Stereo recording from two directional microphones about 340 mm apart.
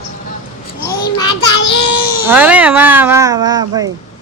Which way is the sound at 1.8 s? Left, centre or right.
Left.